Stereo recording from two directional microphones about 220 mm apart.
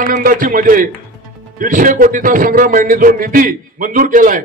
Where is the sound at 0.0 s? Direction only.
40° right (ahead or behind).